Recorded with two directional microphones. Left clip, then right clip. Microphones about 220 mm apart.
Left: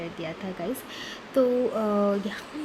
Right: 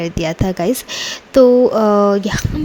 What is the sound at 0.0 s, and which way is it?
Speech, 45° right (ahead or behind).